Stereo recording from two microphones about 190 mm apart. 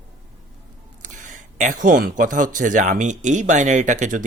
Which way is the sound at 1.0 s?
40° right (ahead or behind).